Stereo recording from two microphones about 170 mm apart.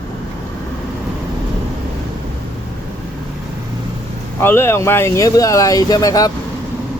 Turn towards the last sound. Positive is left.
turn(degrees=20)  # may be behind; listen again after turning